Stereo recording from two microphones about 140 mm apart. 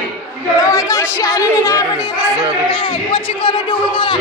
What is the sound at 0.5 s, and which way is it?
Speech, 25° left (ahead or behind).